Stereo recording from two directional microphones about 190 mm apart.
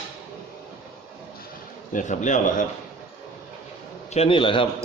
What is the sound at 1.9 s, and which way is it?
Speech, 40° left (ahead or behind).